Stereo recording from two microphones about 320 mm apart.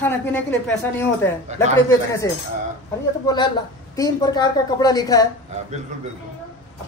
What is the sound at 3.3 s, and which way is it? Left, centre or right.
A woman's voice, centre.